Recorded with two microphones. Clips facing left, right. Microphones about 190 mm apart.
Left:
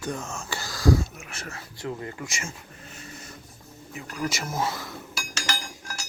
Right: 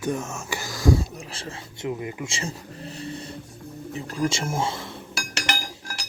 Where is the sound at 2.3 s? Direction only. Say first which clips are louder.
Right 5 dB; 35° right (ahead or behind).